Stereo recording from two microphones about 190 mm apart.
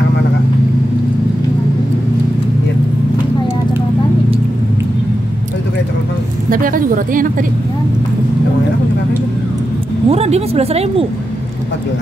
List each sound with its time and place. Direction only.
6.5 s a woman's voice: 45° right (ahead or behind)
10.0 s speech: 30° right (ahead or behind)